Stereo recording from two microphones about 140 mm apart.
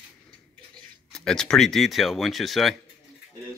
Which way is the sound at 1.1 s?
5° left (ahead or behind).